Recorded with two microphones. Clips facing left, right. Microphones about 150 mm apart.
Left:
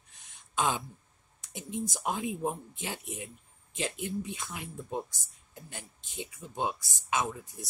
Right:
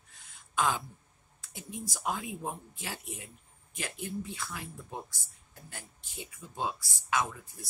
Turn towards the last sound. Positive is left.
turn(degrees=20)  # may be behind; listen again after turning